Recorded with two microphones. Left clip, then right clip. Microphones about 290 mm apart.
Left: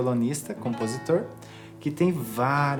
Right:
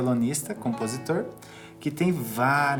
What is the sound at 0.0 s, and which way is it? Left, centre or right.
Speech, left.